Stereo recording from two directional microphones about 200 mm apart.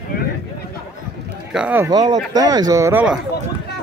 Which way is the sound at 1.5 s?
5° right (ahead or behind).